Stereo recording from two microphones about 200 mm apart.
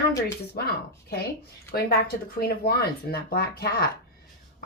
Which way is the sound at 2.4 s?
50° left (ahead or behind).